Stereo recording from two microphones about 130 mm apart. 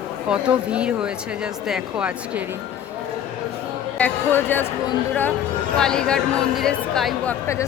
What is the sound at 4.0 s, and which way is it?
Speech, 15° left (ahead or behind).